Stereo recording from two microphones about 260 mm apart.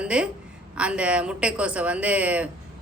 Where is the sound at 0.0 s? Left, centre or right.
Centre.